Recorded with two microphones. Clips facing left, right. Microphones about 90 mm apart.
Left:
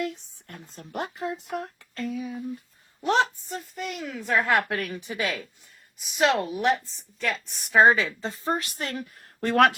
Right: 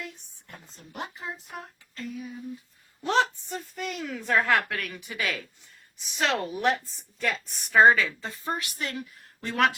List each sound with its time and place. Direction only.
0.8 s speech: 60° left (ahead or behind); by 2.4 s 85° left
3.0 s a woman's voice: 20° left (ahead or behind)
3.5 s a woman's voice: 5° left (ahead or behind)
4.4 s speech: 25° left (ahead or behind)
6.1 s a woman's voice: 10° left (ahead or behind)
7.7 s a woman's voice: 20° left (ahead or behind); by 9.7 s 55° left (ahead or behind)